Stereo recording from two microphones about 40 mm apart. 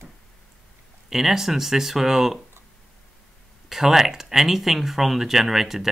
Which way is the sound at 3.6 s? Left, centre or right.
Centre.